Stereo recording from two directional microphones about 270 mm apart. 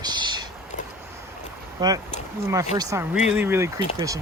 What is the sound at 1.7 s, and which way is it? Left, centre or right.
Speech, centre.